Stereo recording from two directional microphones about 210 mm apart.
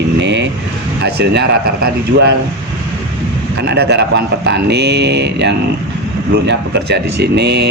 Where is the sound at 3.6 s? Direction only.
50° right (ahead or behind).